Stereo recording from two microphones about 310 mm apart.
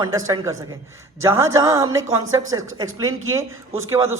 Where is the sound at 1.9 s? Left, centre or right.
Right.